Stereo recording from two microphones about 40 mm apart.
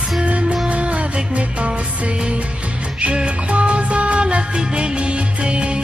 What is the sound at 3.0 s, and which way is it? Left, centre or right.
Music, right.